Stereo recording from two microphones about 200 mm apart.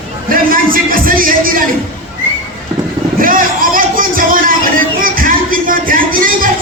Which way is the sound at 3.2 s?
45° right (ahead or behind).